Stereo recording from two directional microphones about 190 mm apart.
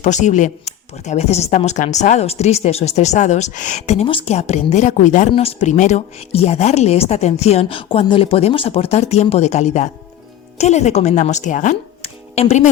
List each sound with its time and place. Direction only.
0.0 s speech: 40° left (ahead or behind)